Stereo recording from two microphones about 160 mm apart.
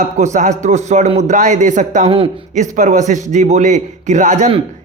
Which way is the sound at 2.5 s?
50° right (ahead or behind).